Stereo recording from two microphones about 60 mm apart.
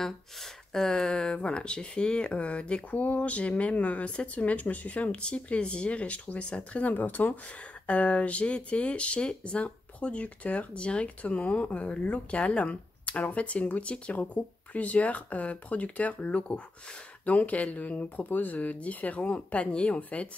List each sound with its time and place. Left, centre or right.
0.7 s speech: centre